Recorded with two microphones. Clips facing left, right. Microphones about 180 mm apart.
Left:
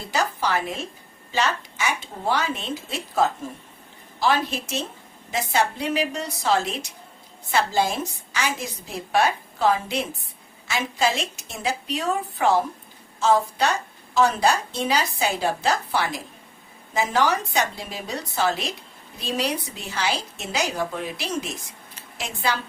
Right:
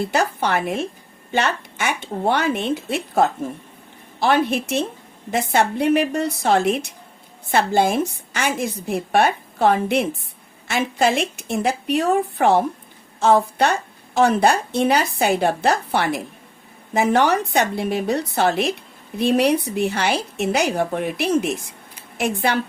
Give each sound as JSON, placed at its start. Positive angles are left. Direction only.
{"t": 0.0, "sound": "a woman's voice", "side_deg": -60}